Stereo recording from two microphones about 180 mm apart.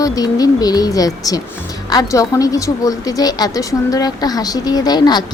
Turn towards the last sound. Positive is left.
turn(degrees=25)  # may be behind; listen again after turning